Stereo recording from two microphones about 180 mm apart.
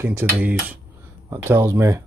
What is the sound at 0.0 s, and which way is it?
Speech, 15° right (ahead or behind).